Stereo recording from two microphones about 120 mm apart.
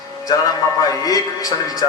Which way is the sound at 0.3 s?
30° left (ahead or behind).